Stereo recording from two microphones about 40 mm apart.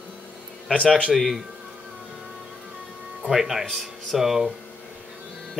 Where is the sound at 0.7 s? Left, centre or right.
Left.